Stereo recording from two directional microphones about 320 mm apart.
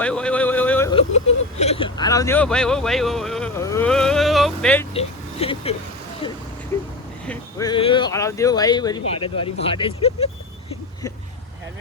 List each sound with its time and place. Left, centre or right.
0.0 s a sound: centre
1.5 s hiccup: centre
4.9 s speech: centre
6.7 s vehicle: centre
7.3 s speech: centre